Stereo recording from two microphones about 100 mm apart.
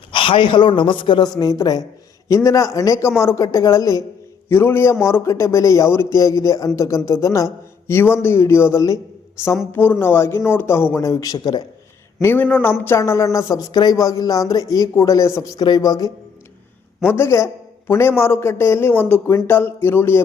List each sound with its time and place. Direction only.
0.1 s a man's voice: 55° left (ahead or behind)
1.4 s a man's voice: 35° left (ahead or behind)
9.7 s a man's voice: 20° left (ahead or behind); by 11.6 s 40° left (ahead or behind)
12.2 s a man's voice: 20° left (ahead or behind)
13.0 s speech: 30° left (ahead or behind)
15.5 s speech: 45° left (ahead or behind)
17.1 s a man's voice: 25° left (ahead or behind)